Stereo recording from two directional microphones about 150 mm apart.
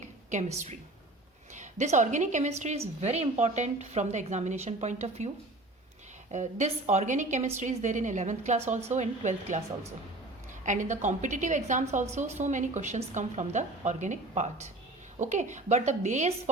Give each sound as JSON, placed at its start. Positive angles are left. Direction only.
{"t": 1.5, "sound": "a woman's voice", "side_deg": -55}
{"t": 6.3, "sound": "a woman's voice", "side_deg": -50}
{"t": 10.7, "sound": "a woman's voice", "side_deg": -55}